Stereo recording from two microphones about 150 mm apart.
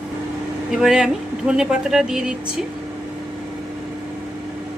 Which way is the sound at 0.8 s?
5° right (ahead or behind).